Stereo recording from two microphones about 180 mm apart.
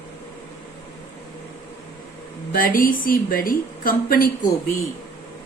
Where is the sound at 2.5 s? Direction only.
55° left (ahead or behind).